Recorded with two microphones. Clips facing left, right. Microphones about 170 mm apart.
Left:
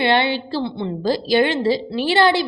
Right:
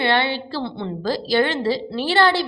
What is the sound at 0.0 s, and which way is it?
A woman's voice, 20° left (ahead or behind).